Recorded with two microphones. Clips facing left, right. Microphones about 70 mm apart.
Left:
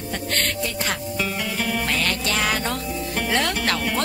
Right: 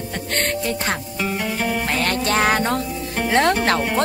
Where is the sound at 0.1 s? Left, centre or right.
Right.